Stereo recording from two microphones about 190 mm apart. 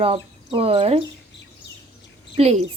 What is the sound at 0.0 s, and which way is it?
Speech, 30° right (ahead or behind).